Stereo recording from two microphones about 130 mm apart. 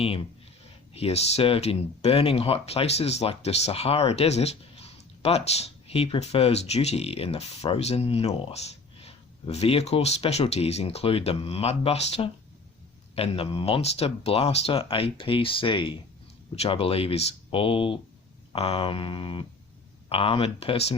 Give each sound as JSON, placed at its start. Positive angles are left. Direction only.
{"t": 0.0, "sound": "speech", "side_deg": 45}